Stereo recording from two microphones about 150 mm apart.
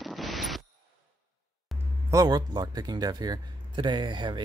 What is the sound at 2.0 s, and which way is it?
Speech, 25° right (ahead or behind).